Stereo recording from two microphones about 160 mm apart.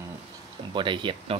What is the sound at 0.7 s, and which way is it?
Speech, 30° right (ahead or behind).